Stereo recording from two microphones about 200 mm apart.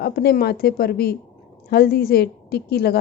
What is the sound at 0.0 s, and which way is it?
Speech, 50° left (ahead or behind).